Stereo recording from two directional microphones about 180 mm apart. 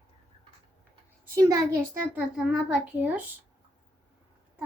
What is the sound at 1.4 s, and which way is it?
Speech, 15° right (ahead or behind).